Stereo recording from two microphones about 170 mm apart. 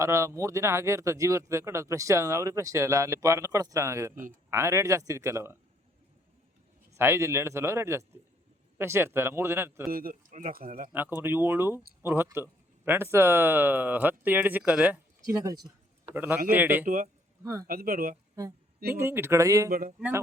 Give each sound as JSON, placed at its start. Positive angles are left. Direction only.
{"t": 0.0, "sound": "speech", "side_deg": -15}
{"t": 6.9, "sound": "speech", "side_deg": -15}
{"t": 9.9, "sound": "speech", "side_deg": -55}
{"t": 10.9, "sound": "speech", "side_deg": -10}
{"t": 16.8, "sound": "a man's voice", "side_deg": -50}
{"t": 17.4, "sound": "speech", "side_deg": -20}
{"t": 17.7, "sound": "speech", "side_deg": -60}
{"t": 18.9, "sound": "speech", "side_deg": -15}